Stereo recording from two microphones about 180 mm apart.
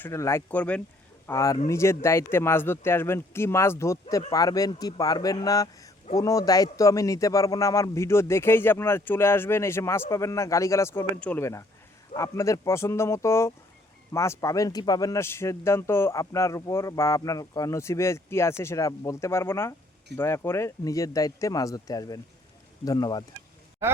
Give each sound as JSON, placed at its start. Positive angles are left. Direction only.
{"t": 0.0, "sound": "speech", "side_deg": 15}